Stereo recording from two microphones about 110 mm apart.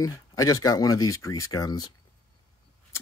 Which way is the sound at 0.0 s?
30° left (ahead or behind).